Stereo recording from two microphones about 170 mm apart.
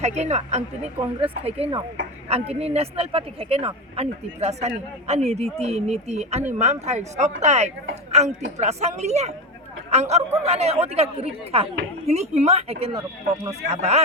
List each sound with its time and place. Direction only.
0.0 s speech: 40° right (ahead or behind)